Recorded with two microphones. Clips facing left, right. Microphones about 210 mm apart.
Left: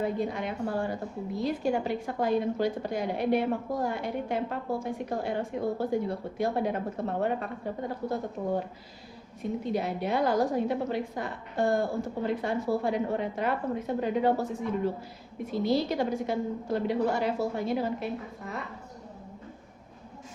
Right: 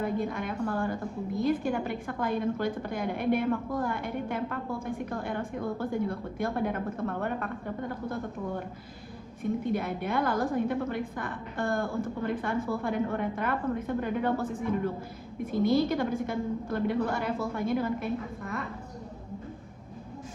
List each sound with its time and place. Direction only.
0.0 s a woman's voice: 50° right (ahead or behind)
9.4 s a woman's voice: 55° right (ahead or behind)